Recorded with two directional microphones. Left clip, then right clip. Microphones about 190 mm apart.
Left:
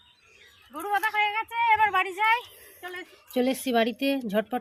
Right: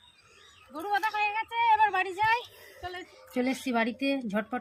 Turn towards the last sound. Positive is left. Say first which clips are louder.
# left 4 dB
turn(degrees=35)  # may be behind; listen again after turning